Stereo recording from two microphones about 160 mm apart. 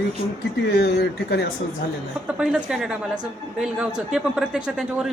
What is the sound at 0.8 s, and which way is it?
Speech, 90° left.